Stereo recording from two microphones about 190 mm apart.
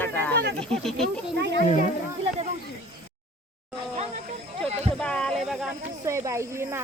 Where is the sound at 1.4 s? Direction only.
60° right (ahead or behind).